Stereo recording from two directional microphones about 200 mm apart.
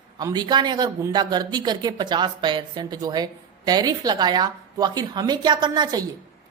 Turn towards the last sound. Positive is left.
turn(degrees=-20)  # may be behind; listen again after turning